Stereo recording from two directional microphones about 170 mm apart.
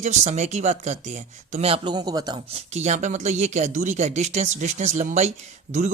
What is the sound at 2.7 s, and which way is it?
A man's voice, 45° right (ahead or behind).